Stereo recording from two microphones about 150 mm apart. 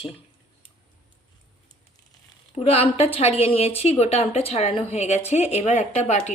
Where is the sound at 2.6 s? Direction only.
40° left (ahead or behind).